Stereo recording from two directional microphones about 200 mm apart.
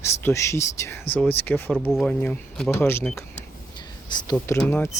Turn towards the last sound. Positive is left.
turn(degrees=10)  # may be behind; listen again after turning